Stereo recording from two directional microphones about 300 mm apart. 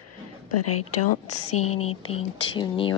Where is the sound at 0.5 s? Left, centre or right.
Left.